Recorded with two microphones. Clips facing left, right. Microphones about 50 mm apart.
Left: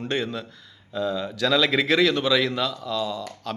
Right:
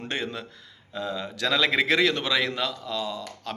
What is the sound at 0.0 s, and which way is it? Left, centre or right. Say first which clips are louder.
Speech: left 4 dB; right.